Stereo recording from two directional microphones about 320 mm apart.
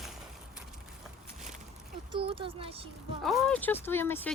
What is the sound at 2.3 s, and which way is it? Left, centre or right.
Speech, centre.